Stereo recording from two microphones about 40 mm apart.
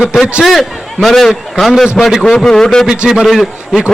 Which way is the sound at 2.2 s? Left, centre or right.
Centre.